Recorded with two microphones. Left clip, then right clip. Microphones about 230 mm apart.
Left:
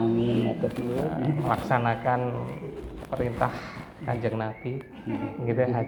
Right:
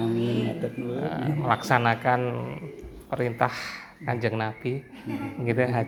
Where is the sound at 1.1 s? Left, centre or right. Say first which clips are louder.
Right 1 dB; right.